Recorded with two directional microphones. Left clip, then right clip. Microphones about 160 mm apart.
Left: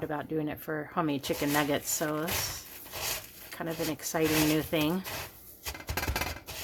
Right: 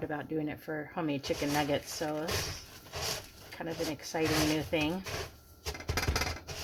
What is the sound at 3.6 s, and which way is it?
A woman's voice, 25° left (ahead or behind).